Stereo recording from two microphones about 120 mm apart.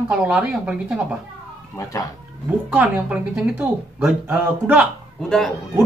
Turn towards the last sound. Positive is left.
turn(degrees=5)  # may be behind; listen again after turning